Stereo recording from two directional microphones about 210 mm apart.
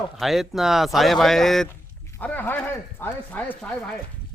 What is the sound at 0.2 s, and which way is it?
Speech, centre (ahead or behind).